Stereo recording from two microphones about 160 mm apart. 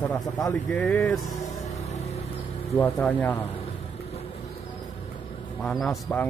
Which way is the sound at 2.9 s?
10° left (ahead or behind).